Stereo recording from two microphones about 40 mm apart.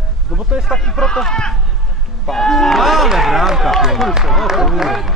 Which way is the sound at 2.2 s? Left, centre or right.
Centre.